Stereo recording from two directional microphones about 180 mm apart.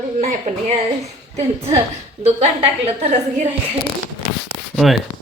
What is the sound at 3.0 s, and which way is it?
Speech, 35° right (ahead or behind).